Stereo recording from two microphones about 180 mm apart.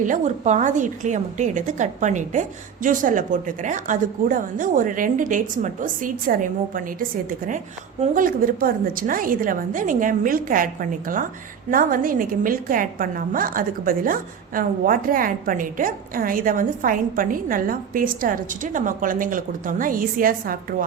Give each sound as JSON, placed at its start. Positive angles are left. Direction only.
{"t": 0.0, "sound": "a woman's voice", "side_deg": -45}